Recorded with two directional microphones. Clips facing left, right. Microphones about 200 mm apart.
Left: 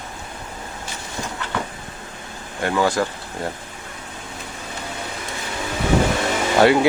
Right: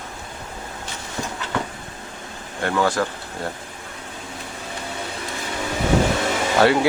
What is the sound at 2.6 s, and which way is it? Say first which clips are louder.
Speech: left 1 dB; 15° left (ahead or behind).